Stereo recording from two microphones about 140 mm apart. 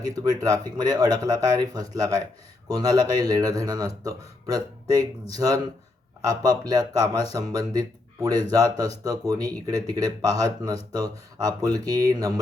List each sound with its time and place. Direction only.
0.0 s speech: 25° right (ahead or behind)